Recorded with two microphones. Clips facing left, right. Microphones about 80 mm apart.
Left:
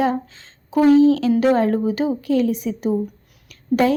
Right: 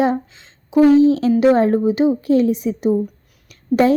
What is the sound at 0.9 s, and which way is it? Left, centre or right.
A woman's voice, right.